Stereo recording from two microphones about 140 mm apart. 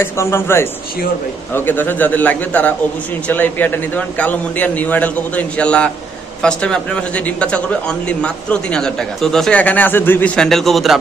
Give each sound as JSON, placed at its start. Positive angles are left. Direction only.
{"t": 0.0, "sound": "a man's voice", "side_deg": 20}